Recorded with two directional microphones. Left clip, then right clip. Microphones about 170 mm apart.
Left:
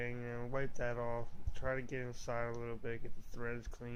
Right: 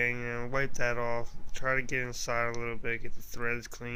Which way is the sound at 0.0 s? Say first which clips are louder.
Right 12 dB; 10° right (ahead or behind).